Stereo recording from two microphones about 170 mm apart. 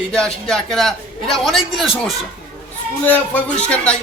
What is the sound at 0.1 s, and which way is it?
A man's voice, 5° left (ahead or behind).